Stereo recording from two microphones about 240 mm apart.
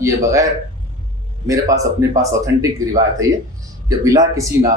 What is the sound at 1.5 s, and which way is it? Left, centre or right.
Speech, centre.